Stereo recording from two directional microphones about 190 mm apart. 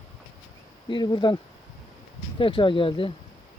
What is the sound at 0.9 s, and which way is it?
Speech, 25° left (ahead or behind).